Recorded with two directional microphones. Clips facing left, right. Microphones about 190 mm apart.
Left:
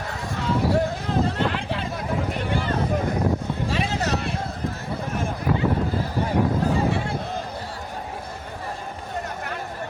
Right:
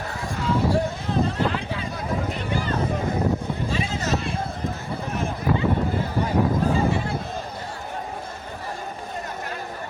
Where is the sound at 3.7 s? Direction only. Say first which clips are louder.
Left 1 dB; 65° left (ahead or behind).